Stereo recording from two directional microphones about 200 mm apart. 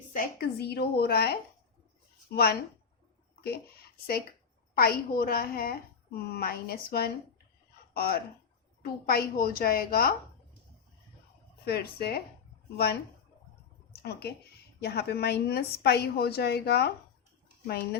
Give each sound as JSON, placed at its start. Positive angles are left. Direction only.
{"t": 0.1, "sound": "a woman's voice", "side_deg": 50}
{"t": 11.6, "sound": "a woman's voice", "side_deg": 50}
{"t": 14.0, "sound": "a woman's voice", "side_deg": 55}